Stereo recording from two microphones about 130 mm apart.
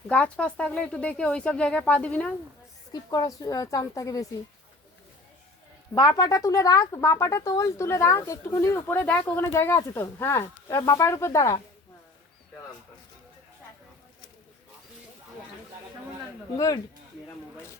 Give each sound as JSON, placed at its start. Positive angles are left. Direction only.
{"t": 0.1, "sound": "speech", "side_deg": 10}
{"t": 2.9, "sound": "speech", "side_deg": 30}
{"t": 5.9, "sound": "speech", "side_deg": 30}
{"t": 16.6, "sound": "speech", "side_deg": 30}